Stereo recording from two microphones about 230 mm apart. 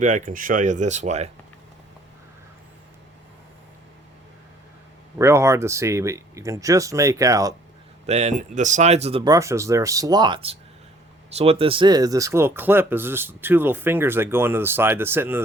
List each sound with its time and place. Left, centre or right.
0.0 s speech: right
5.1 s speech: centre
8.0 s speech: right; by 15.4 s centre